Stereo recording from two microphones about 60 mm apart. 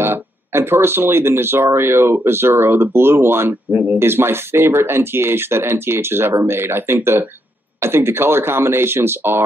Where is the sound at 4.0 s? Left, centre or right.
Right.